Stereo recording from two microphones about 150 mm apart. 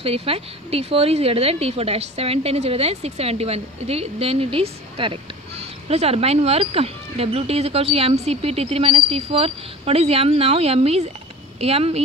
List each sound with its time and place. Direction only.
0.0 s a woman's voice: 40° right (ahead or behind)